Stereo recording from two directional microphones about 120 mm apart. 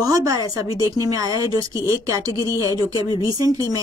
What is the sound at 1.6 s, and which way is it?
Speech, 40° left (ahead or behind).